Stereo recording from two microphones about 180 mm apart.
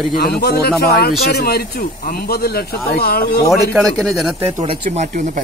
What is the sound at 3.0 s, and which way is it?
Speech, 55° left (ahead or behind).